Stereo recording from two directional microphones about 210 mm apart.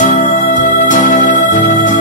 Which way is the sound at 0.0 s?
35° left (ahead or behind).